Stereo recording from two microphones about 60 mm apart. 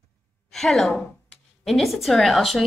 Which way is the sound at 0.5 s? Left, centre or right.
Centre.